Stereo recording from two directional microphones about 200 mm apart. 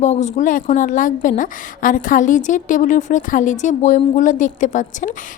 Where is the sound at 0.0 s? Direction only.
35° left (ahead or behind).